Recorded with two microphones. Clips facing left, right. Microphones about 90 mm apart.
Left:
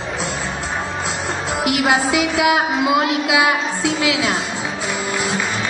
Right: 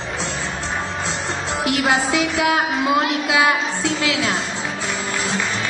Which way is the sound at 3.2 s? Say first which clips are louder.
Left 1 dB; 15° left (ahead or behind).